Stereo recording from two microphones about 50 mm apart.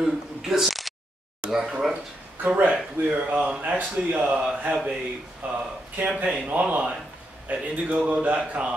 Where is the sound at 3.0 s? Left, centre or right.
Right.